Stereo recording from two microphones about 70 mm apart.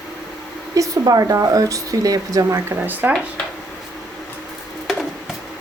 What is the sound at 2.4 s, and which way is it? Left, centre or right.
Speech, right.